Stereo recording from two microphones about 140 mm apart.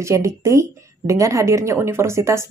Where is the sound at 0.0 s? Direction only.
20° right (ahead or behind).